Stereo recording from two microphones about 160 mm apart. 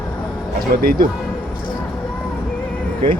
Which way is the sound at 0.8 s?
65° right (ahead or behind).